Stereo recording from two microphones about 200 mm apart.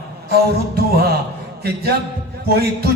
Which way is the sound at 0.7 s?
50° right (ahead or behind).